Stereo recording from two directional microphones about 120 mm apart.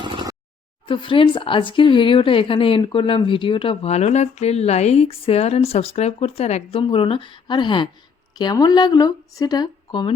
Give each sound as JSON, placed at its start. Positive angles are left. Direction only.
{"t": 0.0, "sound": "a sound", "side_deg": -40}
{"t": 0.9, "sound": "speech", "side_deg": 45}
{"t": 3.8, "sound": "speech", "side_deg": 65}